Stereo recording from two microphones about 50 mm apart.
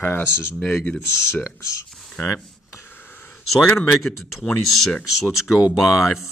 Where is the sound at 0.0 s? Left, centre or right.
Left.